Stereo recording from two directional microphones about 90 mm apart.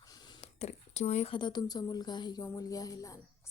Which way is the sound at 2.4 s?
40° left (ahead or behind).